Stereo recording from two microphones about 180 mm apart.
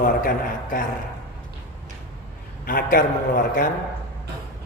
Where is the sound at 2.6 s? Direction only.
55° left (ahead or behind).